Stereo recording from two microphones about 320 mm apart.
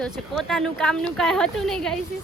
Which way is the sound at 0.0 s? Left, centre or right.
Centre.